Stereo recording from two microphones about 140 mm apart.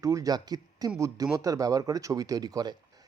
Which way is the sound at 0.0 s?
25° right (ahead or behind).